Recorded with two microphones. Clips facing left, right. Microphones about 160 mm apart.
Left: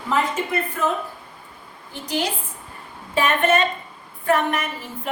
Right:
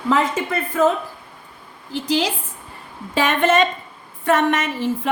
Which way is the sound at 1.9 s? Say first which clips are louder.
Right 5 dB; 90° right.